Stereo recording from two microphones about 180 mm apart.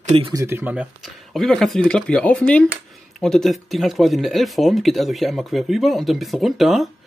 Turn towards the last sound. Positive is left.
turn(degrees=0)  # may be behind; listen again after turning